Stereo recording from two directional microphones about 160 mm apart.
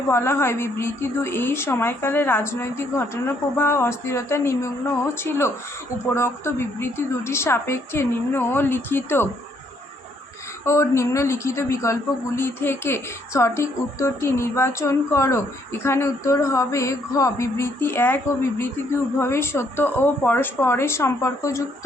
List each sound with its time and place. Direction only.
0.1 s a woman's voice: 15° left (ahead or behind)
10.7 s a woman's voice: 15° left (ahead or behind)